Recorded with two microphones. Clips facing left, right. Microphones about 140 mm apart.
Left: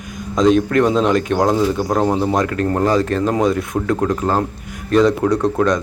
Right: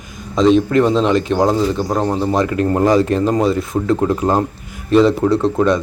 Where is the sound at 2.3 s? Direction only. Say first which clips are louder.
Right 2 dB; 5° right (ahead or behind).